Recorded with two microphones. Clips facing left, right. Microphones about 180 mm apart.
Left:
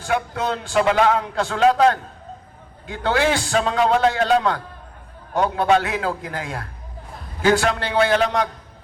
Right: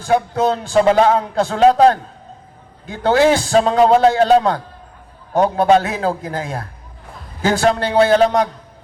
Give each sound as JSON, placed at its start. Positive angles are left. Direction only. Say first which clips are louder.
{"t": 0.0, "sound": "a man's voice", "louder": "right 7 dB", "side_deg": -40}